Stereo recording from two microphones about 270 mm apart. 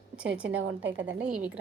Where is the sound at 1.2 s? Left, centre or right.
Centre.